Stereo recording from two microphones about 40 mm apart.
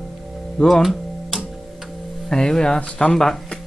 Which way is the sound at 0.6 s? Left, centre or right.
Left.